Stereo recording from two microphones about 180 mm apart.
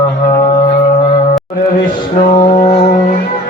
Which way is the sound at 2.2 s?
25° left (ahead or behind).